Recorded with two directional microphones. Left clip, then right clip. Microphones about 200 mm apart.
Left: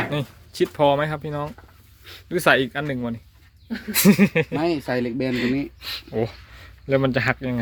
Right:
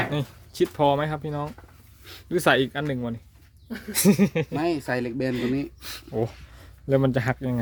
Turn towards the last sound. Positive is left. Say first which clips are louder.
# left 4 dB
turn(degrees=-15)  # may be behind; listen again after turning